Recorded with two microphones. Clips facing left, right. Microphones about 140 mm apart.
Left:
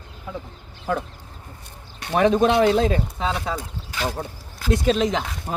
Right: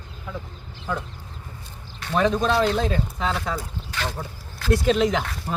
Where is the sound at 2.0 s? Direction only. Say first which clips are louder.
Left 4 dB; 20° left (ahead or behind).